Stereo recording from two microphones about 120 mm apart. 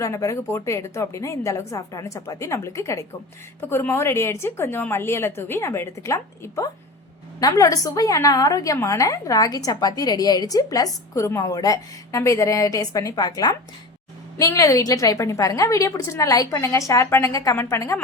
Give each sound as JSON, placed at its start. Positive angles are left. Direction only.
{"t": 0.0, "sound": "a woman's voice", "side_deg": 25}